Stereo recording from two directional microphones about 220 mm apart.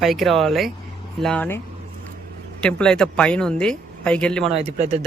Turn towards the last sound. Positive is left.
turn(degrees=-30)  # may be behind; listen again after turning